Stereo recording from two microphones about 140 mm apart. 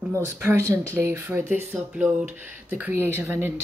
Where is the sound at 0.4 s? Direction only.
20° right (ahead or behind).